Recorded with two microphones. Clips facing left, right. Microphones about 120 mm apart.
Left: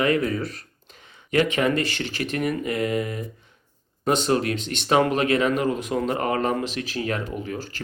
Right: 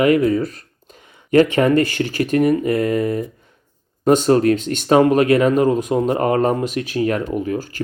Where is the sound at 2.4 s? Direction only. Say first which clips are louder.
Right 7 dB; 40° right (ahead or behind).